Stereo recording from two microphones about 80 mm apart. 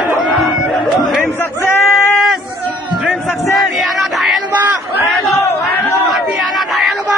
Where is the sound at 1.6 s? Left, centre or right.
Left.